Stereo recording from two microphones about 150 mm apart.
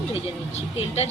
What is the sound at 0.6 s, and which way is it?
Speech, 45° left (ahead or behind).